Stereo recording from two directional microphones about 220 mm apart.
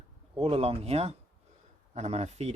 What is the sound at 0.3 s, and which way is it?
Speech, 25° right (ahead or behind).